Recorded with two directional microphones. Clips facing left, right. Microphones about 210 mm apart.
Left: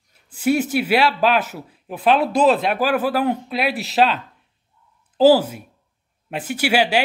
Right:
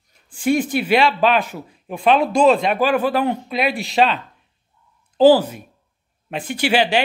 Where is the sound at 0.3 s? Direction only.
10° left (ahead or behind).